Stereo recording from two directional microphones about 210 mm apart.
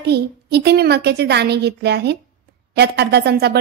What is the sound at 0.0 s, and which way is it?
A woman's voice, 50° right (ahead or behind).